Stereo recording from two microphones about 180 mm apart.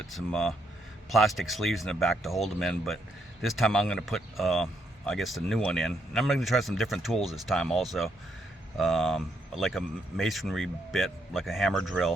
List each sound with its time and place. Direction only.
0.0 s speech: centre (ahead or behind)